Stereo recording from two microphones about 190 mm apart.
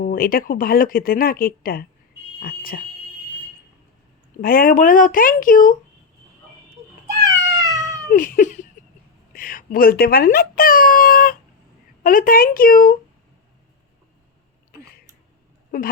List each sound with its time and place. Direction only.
0.0 s speech: 50° left (ahead or behind)
4.4 s speech: 50° left (ahead or behind)
7.3 s cat: 15° right (ahead or behind)
8.1 s a sound: 45° left (ahead or behind)
9.3 s speech: 50° left (ahead or behind)
15.7 s speech: 50° left (ahead or behind)